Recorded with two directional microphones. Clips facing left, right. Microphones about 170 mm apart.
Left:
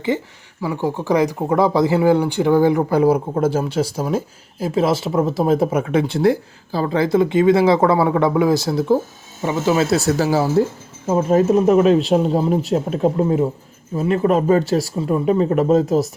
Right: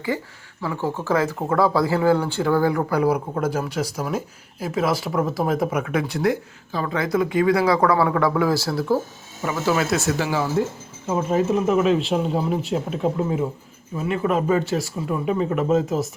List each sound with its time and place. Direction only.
0.1 s speech: 20° left (ahead or behind); by 16.0 s 35° left (ahead or behind)